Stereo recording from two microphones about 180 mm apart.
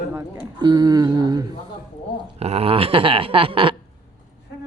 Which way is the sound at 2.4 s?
35° right (ahead or behind).